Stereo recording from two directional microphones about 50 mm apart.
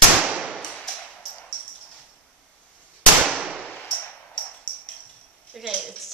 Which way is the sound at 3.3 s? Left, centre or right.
Centre.